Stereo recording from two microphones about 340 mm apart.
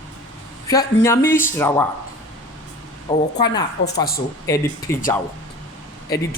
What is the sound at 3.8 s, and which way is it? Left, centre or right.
Speech, left.